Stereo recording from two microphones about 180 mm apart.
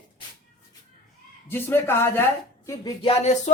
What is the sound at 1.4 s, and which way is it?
Speech, 10° left (ahead or behind).